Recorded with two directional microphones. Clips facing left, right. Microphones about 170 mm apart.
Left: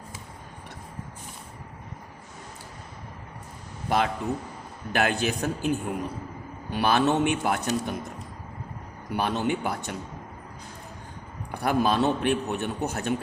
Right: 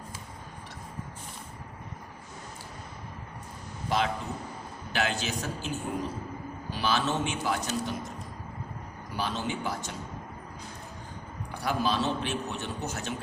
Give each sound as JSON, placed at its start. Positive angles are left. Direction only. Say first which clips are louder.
{"t": 3.8, "sound": "a man's voice", "louder": "left 4 dB", "side_deg": 55}
{"t": 9.1, "sound": "a man's voice", "louder": "left 6 dB", "side_deg": 60}
{"t": 11.5, "sound": "a man's voice", "louder": "left 5 dB", "side_deg": 55}